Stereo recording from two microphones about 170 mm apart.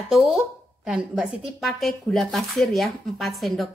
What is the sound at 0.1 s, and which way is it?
Speech, centre (ahead or behind).